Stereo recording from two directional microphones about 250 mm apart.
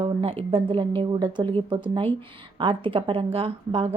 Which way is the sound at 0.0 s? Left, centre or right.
Right.